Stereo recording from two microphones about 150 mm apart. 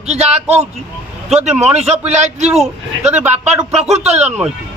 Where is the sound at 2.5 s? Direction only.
5° right (ahead or behind).